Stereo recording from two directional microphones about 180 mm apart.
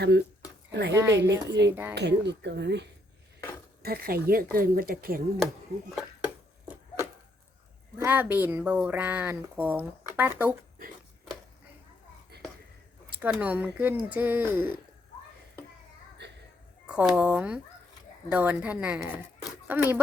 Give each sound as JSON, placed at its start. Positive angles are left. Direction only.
{"t": 0.7, "sound": "speech", "side_deg": -70}
{"t": 0.9, "sound": "speech", "side_deg": -15}
{"t": 1.3, "sound": "speech", "side_deg": -75}
{"t": 1.7, "sound": "speech", "side_deg": -10}
{"t": 2.0, "sound": "speech", "side_deg": -70}
{"t": 3.8, "sound": "speech", "side_deg": -60}
{"t": 6.0, "sound": "a sound", "side_deg": -10}
{"t": 7.9, "sound": "speech", "side_deg": -10}
{"t": 12.3, "sound": "a sound", "side_deg": -65}
{"t": 13.1, "sound": "speech", "side_deg": -10}
{"t": 16.8, "sound": "speech", "side_deg": -5}